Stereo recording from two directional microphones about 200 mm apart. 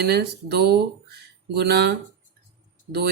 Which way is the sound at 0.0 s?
55° right (ahead or behind).